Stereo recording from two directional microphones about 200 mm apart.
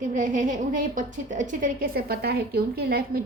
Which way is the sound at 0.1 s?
40° right (ahead or behind).